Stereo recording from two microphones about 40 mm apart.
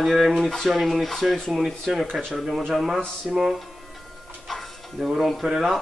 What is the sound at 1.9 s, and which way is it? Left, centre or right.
Speech, centre.